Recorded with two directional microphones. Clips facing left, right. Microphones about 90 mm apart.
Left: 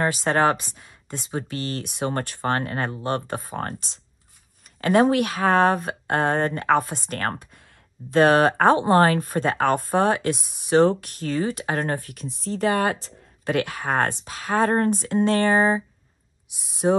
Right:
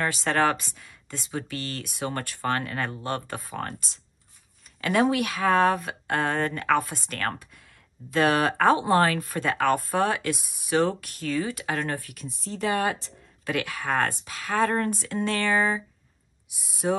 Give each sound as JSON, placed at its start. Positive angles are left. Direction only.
{"t": 0.0, "sound": "speech", "side_deg": 25}
{"t": 4.7, "sound": "speech", "side_deg": 40}
{"t": 12.5, "sound": "speech", "side_deg": 55}
{"t": 13.0, "sound": "speech", "side_deg": 35}
{"t": 16.8, "sound": "speech", "side_deg": 35}